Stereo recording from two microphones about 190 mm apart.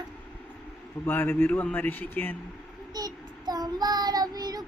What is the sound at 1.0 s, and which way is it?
A man's voice, 10° left (ahead or behind).